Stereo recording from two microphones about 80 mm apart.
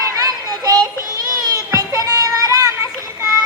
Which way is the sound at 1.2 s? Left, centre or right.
Right.